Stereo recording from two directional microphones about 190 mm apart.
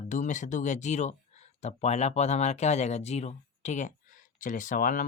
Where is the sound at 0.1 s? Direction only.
40° left (ahead or behind).